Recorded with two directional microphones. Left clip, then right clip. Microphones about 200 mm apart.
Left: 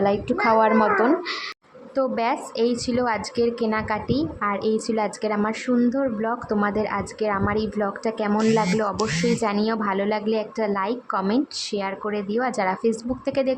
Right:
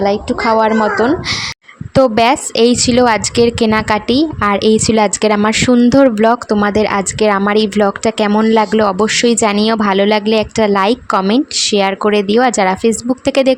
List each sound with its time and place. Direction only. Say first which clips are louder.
0.0 s a woman's voice: right 7 dB; 45° right (ahead or behind)